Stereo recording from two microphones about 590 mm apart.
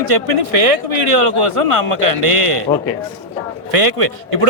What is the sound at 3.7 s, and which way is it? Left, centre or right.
Speech, right.